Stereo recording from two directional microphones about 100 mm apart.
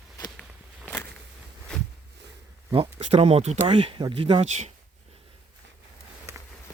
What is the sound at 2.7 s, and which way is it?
Speech, 70° right (ahead or behind).